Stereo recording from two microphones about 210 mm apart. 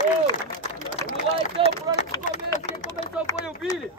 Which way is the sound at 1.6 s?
25° right (ahead or behind).